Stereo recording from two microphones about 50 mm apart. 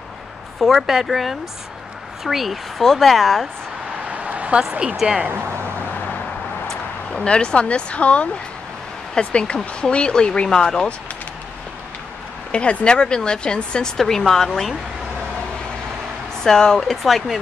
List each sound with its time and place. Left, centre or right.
0.6 s speech: centre
4.1 s a sound: right
5.0 s speech: right
6.7 s a sound: centre
7.2 s speech: left
12.4 s speech: left
13.9 s speech: centre
16.4 s speech: centre
16.8 s speech: centre